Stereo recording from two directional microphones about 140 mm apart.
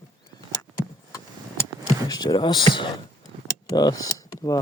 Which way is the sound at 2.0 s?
30° left (ahead or behind).